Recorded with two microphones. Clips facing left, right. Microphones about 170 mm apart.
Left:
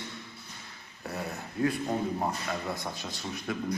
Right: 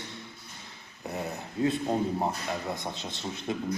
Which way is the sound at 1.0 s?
20° right (ahead or behind).